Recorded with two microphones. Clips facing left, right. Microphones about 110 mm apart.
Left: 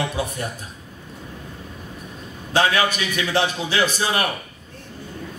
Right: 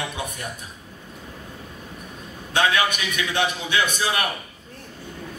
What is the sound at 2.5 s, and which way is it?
A man's voice, 35° left (ahead or behind).